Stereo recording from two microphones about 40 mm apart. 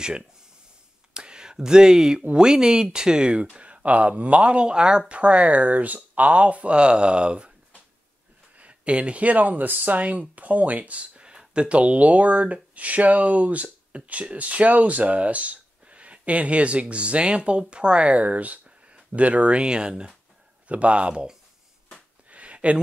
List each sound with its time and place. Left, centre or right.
1.1 s speech: right
8.5 s speech: right
20.6 s speech: right
22.3 s a sound: right